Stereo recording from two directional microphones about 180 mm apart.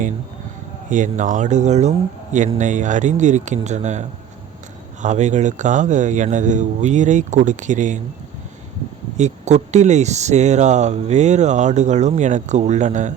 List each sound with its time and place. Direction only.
0.9 s speech: 45° right (ahead or behind)
5.0 s speech: 40° right (ahead or behind)
9.1 s speech: 40° right (ahead or behind)